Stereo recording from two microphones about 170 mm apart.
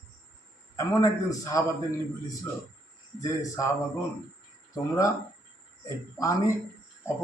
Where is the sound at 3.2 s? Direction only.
20° left (ahead or behind).